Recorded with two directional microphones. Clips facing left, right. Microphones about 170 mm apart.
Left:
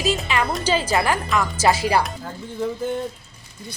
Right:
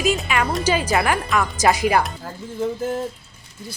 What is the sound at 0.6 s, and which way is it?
A man's voice, 15° right (ahead or behind).